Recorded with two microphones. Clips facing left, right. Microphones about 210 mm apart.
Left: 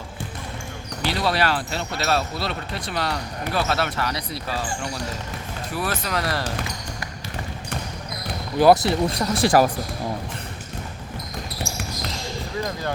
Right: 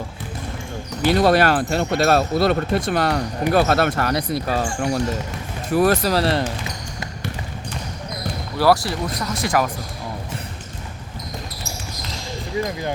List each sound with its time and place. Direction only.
1.0 s speech: 50° right (ahead or behind); by 6.4 s 30° right (ahead or behind)
8.5 s speech: 20° left (ahead or behind)
9.1 s speech: 30° left (ahead or behind)